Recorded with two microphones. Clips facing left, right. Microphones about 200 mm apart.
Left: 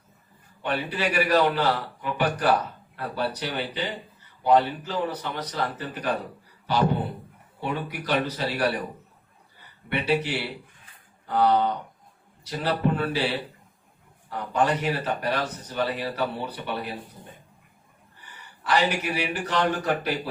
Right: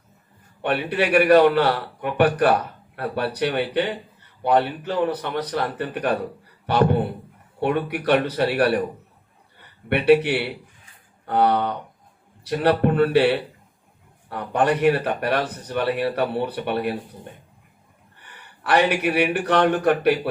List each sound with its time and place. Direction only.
0.6 s a man's voice: 65° right (ahead or behind)
18.2 s speech: 65° right (ahead or behind)